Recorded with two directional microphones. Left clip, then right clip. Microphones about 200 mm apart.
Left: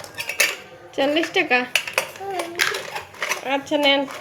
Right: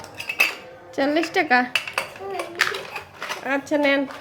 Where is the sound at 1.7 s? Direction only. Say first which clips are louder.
Left 3 dB; 20° left (ahead or behind).